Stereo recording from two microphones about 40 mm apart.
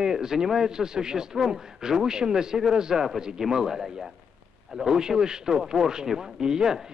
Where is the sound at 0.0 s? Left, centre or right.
Centre.